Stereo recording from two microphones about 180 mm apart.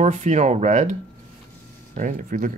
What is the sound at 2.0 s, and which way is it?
Speech, 45° right (ahead or behind).